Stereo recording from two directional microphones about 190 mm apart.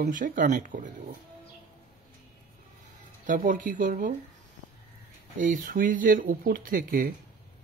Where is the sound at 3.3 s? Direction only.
45° right (ahead or behind).